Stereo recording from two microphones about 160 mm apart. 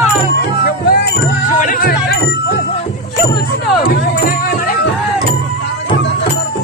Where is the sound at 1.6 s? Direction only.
60° left (ahead or behind).